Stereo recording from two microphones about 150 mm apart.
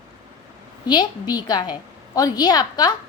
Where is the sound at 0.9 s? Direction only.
30° left (ahead or behind).